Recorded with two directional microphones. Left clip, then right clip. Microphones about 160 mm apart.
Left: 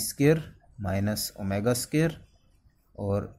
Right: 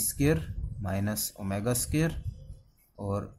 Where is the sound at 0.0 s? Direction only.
20° left (ahead or behind).